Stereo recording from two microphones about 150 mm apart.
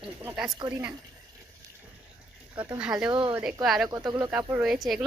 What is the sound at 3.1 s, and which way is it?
Speech, 35° right (ahead or behind).